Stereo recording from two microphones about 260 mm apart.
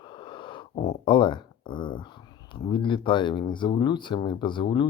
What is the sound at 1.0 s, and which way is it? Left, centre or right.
Speech, centre.